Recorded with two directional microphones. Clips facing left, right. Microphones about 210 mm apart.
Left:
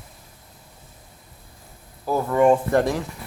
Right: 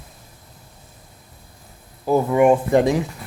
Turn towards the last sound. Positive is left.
turn(degrees=-15)  # may be behind; listen again after turning